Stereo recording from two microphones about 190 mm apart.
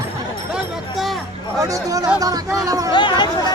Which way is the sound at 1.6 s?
20° right (ahead or behind).